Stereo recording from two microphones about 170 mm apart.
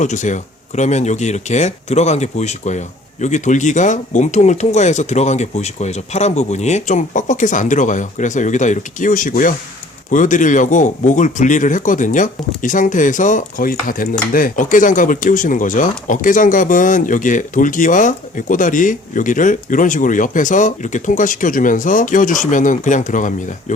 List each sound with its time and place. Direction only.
0.0 s speech: 45° left (ahead or behind)